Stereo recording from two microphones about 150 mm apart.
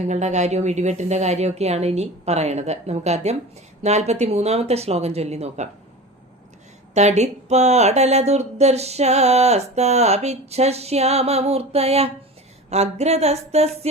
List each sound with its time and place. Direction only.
0.1 s speech: 50° right (ahead or behind)
6.9 s speech: 50° right (ahead or behind)